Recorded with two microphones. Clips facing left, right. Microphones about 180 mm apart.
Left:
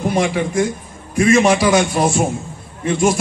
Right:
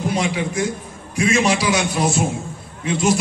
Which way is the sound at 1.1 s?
55° left (ahead or behind).